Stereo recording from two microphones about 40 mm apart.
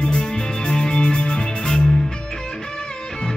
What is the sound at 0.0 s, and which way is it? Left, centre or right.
Music, left.